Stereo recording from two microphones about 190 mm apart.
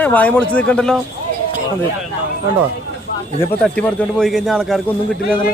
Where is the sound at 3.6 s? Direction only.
5° left (ahead or behind).